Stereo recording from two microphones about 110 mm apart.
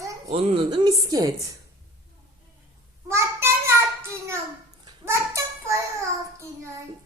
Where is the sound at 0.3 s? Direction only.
65° right (ahead or behind).